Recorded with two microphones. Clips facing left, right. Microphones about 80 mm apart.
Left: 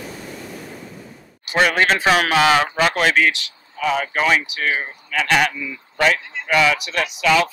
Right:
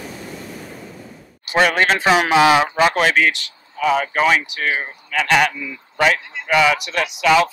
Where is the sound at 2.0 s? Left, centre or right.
Centre.